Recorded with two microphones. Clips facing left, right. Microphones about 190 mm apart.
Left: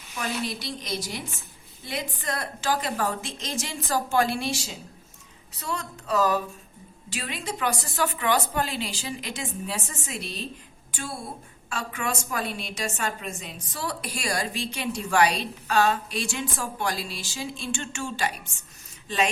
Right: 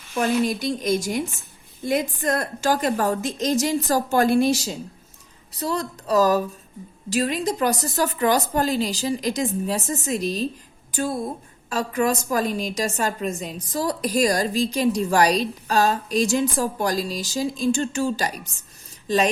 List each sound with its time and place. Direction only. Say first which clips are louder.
0.2 s a woman's voice: right 9 dB; 45° right (ahead or behind)